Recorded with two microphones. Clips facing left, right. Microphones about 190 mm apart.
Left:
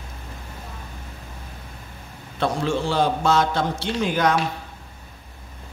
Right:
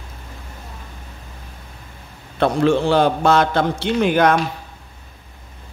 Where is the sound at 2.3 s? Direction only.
60° right (ahead or behind).